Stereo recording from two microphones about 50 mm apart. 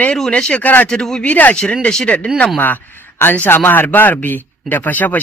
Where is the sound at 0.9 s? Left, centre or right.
Centre.